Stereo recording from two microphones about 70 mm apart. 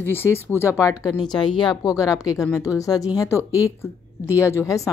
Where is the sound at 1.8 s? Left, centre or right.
Left.